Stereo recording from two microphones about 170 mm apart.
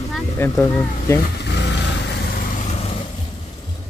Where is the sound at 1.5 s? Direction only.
90° left.